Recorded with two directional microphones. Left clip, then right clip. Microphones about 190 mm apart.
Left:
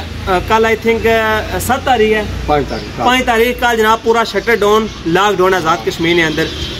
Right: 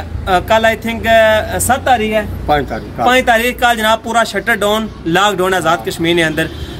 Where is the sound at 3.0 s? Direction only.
30° right (ahead or behind).